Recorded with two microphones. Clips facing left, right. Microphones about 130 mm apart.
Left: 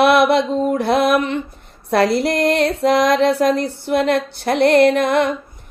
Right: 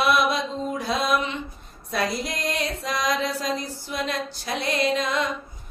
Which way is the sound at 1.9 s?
70° left (ahead or behind).